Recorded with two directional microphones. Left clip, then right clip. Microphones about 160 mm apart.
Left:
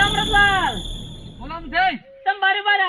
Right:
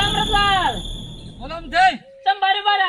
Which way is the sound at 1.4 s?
30° right (ahead or behind).